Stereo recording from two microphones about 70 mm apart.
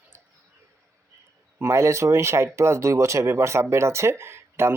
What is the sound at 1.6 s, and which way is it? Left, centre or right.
Speech, right.